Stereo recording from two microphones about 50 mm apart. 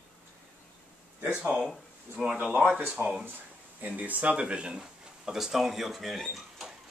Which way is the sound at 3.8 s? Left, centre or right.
Right.